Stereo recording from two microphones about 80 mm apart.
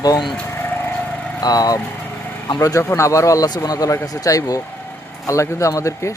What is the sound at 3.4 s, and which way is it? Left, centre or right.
Speech, left.